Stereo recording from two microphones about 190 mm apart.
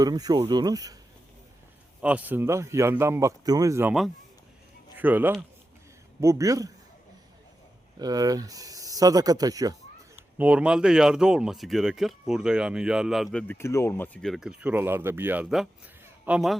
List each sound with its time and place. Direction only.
0.0 s speech: 20° right (ahead or behind)
2.0 s speech: 5° right (ahead or behind)
4.9 s speech: 10° right (ahead or behind)
7.9 s speech: 20° right (ahead or behind)
10.3 s speech: 5° right (ahead or behind)